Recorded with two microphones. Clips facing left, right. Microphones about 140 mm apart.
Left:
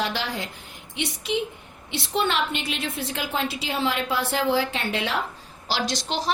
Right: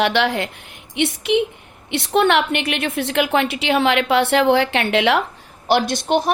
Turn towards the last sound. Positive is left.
turn(degrees=-55)  # may be behind; listen again after turning